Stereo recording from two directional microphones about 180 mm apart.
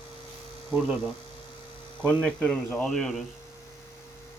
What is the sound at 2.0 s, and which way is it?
Speech, 5° left (ahead or behind).